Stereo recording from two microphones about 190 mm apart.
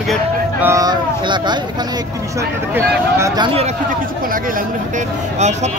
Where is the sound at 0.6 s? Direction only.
15° right (ahead or behind).